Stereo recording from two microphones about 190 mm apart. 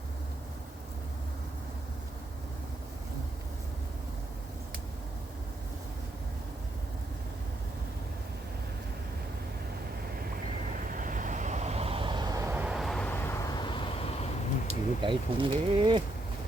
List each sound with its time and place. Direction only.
10.3 s vehicle: 50° right (ahead or behind); by 13.8 s 25° left (ahead or behind)
14.7 s speech: 25° right (ahead or behind)